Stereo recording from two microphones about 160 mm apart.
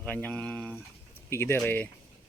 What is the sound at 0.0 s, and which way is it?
Speech, 10° left (ahead or behind).